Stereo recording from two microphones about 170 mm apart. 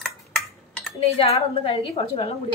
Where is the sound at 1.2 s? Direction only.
35° left (ahead or behind).